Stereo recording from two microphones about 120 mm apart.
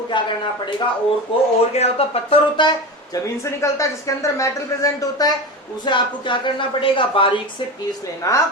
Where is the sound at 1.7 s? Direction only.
60° left (ahead or behind).